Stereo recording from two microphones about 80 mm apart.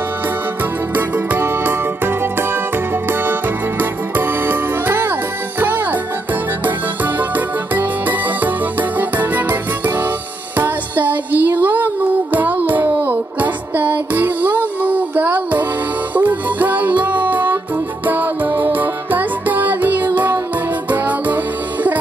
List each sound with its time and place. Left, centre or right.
0.9 s music: right
4.2 s music: right
7.2 s music: right
10.6 s music: right